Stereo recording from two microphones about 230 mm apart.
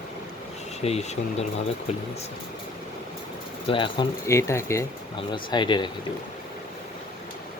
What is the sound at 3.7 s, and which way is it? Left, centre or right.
Speech, left.